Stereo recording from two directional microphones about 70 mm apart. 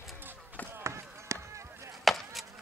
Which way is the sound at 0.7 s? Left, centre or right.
Right.